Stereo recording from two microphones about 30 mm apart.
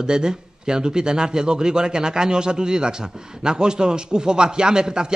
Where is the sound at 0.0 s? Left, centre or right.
Right.